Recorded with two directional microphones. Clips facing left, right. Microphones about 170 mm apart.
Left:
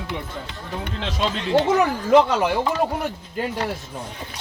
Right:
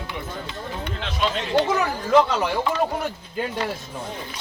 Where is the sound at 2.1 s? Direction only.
15° left (ahead or behind).